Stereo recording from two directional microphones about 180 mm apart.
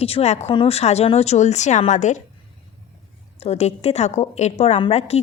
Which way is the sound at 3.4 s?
35° left (ahead or behind).